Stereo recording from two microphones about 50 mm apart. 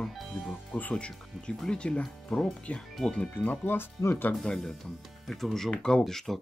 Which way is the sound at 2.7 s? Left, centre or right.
Left.